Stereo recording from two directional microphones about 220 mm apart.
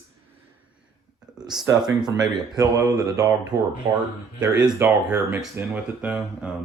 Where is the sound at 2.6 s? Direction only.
15° right (ahead or behind).